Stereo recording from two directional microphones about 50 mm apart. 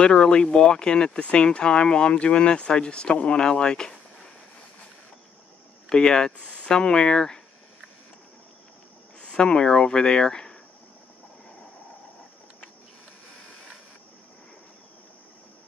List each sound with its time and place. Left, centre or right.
0.0 s speech: centre
5.9 s speech: centre
9.2 s speech: centre